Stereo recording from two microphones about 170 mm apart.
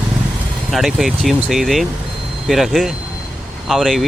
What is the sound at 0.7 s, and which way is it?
Speech, centre (ahead or behind).